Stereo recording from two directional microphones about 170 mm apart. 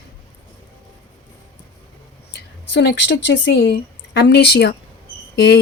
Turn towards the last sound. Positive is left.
turn(degrees=85)